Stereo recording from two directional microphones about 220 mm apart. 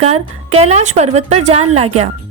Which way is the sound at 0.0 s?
30° right (ahead or behind).